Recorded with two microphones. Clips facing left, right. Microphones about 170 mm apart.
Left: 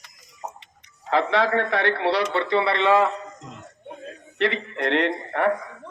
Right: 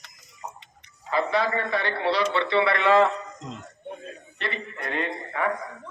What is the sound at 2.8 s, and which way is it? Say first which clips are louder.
Speech: even; 15° left (ahead or behind).